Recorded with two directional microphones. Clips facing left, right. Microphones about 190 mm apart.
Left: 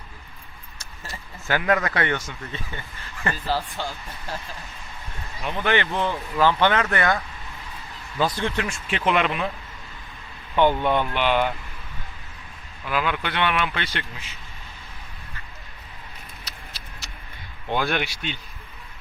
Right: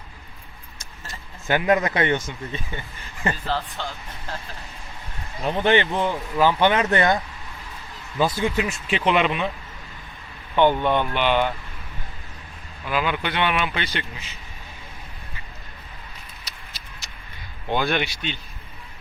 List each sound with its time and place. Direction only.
1.5 s speech: 20° right (ahead or behind)
3.4 s speech: 10° left (ahead or behind)
5.4 s speech: 30° right (ahead or behind)
5.7 s speech: 15° right (ahead or behind)
8.2 s speech: 10° right (ahead or behind)
10.5 s speech: 5° left (ahead or behind)
12.9 s speech: centre (ahead or behind)
17.7 s speech: 5° left (ahead or behind)